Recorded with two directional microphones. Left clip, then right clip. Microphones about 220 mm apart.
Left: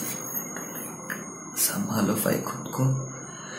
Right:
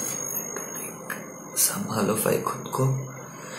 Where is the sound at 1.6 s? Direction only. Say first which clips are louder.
Right 1 dB; 10° right (ahead or behind).